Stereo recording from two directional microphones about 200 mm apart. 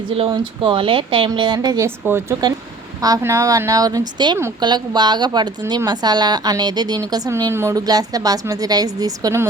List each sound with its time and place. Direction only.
0.1 s a woman's voice: 25° right (ahead or behind)